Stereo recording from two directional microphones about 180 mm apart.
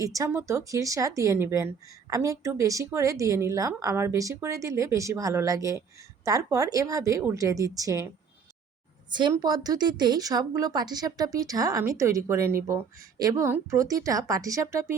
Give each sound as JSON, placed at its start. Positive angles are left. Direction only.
{"t": 0.0, "sound": "speech", "side_deg": -15}
{"t": 9.0, "sound": "a woman's voice", "side_deg": -25}